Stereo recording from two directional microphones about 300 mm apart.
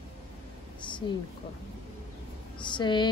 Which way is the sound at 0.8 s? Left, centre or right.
Centre.